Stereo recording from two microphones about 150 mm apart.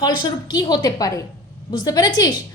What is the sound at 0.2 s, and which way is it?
Speech, 30° left (ahead or behind).